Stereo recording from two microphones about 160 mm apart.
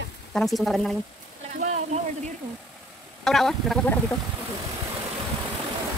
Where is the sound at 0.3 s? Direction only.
Centre (ahead or behind).